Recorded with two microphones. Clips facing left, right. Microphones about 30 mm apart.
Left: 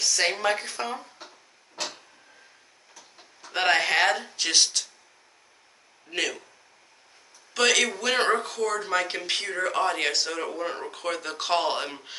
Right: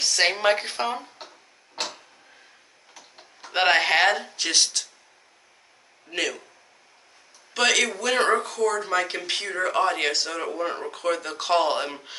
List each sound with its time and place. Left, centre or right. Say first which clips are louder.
0.0 s a sound: right 3 dB; right
0.4 s speech: right 4 dB; right
1.8 s a sound: right 2 dB; right
2.9 s tick-tock: right 3 dB; right
3.4 s speech: right 3 dB; right; by 4.8 s centre
6.0 s speech: right 1 dB; centre
7.5 s speech: right 1 dB; centre
8.0 s speech: right 2 dB; centre